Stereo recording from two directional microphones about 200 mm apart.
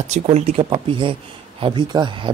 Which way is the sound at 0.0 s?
35° right (ahead or behind).